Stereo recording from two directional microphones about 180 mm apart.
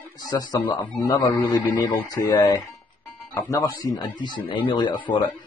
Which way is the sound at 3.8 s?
25° left (ahead or behind).